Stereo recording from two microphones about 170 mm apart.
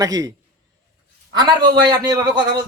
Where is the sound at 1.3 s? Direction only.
25° right (ahead or behind).